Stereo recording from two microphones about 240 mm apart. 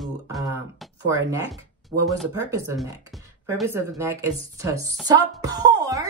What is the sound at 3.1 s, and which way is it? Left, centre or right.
A woman's voice, centre.